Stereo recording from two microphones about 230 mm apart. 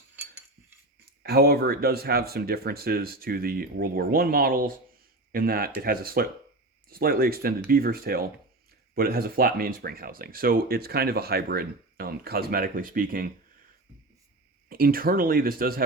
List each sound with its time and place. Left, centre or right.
1.2 s speech: right
14.7 s speech: right